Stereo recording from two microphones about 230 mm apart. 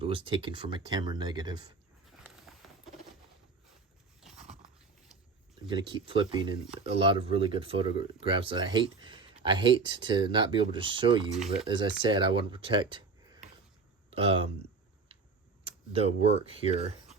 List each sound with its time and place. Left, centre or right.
0.0 s speech: right
2.0 s walk: centre
5.5 s speech: right